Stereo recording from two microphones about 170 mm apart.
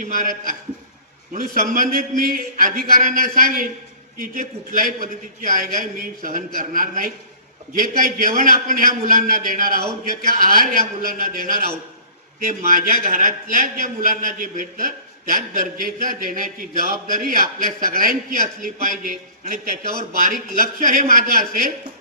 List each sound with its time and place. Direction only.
0.0 s a man's voice: 50° right (ahead or behind)